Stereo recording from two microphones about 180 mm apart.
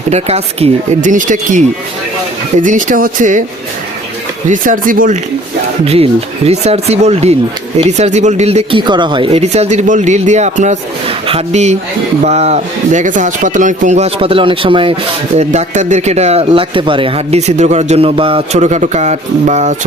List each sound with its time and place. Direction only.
0.1 s speech: 35° right (ahead or behind)
4.4 s speech: 45° right (ahead or behind)
5.8 s speech: 35° right (ahead or behind)
15.4 s speech: 40° right (ahead or behind)